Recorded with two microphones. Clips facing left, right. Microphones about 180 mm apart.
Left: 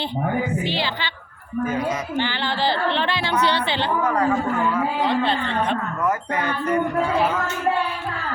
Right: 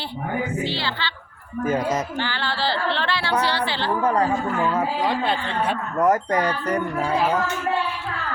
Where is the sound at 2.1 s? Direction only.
20° left (ahead or behind).